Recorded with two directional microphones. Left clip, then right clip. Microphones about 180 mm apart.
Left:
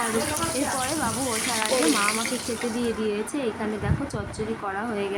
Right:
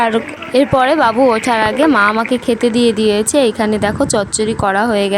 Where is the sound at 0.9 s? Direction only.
65° right (ahead or behind).